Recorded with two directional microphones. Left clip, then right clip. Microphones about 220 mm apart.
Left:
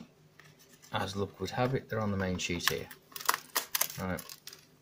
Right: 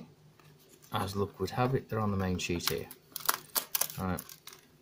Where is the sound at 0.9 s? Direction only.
20° right (ahead or behind).